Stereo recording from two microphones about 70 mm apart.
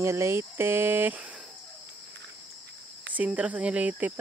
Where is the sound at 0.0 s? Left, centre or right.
Right.